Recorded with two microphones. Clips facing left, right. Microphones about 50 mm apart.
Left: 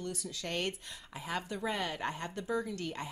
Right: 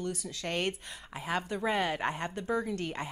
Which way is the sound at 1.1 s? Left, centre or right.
Right.